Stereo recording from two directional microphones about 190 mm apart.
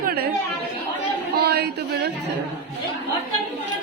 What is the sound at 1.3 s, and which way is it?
Speech, 55° right (ahead or behind).